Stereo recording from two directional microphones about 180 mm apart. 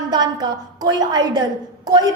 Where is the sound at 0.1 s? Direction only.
20° right (ahead or behind).